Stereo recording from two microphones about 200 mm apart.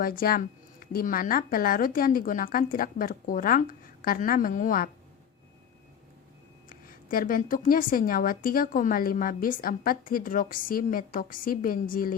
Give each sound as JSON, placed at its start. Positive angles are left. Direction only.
{"t": 0.0, "sound": "a woman's voice", "side_deg": 45}
{"t": 6.7, "sound": "a woman's voice", "side_deg": 45}